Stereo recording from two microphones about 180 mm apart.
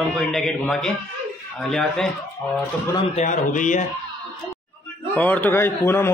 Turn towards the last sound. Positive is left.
turn(degrees=10)  # may be behind; listen again after turning